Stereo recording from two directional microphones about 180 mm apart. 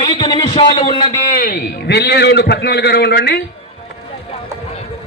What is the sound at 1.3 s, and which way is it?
A man's voice, 55° left (ahead or behind).